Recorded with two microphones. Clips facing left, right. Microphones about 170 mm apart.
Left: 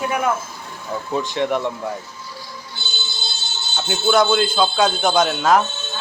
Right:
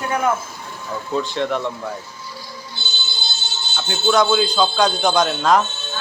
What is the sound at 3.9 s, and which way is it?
A man's voice, 5° left (ahead or behind).